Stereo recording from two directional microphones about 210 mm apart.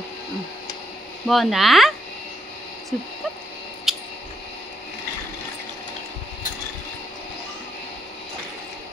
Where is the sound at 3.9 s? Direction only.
Centre (ahead or behind).